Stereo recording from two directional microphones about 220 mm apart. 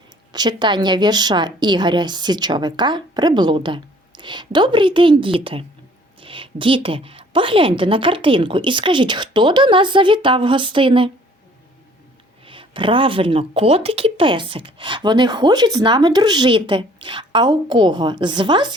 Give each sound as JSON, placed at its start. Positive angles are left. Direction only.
{"t": 0.3, "sound": "speech", "side_deg": -20}
{"t": 12.5, "sound": "speech", "side_deg": -25}